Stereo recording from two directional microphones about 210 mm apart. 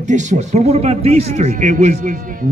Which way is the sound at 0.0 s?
35° right (ahead or behind).